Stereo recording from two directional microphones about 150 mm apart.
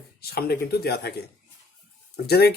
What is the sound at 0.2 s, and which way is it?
Speech, 90° left.